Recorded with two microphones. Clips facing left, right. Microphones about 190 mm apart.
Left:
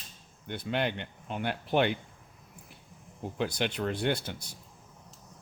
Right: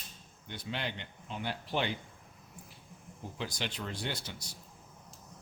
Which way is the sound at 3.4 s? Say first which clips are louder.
Left 8 dB; 60° left (ahead or behind).